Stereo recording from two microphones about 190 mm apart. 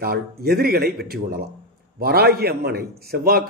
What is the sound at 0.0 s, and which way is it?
A man's voice, 55° right (ahead or behind).